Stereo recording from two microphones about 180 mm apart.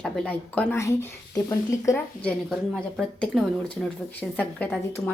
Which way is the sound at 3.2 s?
5° left (ahead or behind).